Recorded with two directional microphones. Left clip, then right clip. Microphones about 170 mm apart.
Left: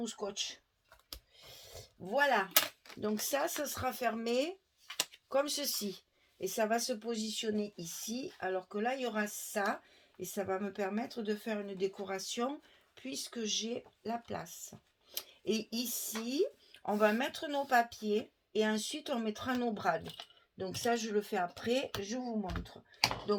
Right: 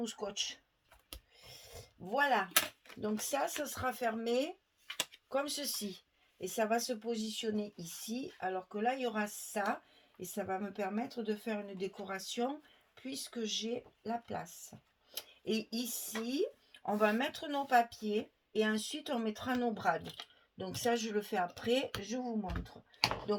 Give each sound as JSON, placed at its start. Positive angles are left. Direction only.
{"t": 0.0, "sound": "speech", "side_deg": 30}
{"t": 1.4, "sound": "a sound", "side_deg": 35}
{"t": 3.0, "sound": "speech", "side_deg": 45}
{"t": 4.9, "sound": "a sound", "side_deg": 10}
{"t": 5.3, "sound": "speech", "side_deg": 45}
{"t": 22.4, "sound": "speech", "side_deg": 25}